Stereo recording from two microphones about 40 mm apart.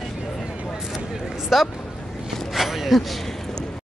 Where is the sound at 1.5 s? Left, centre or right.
Centre.